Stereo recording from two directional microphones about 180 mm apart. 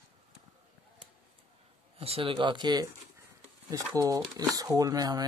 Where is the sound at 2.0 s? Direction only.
30° right (ahead or behind).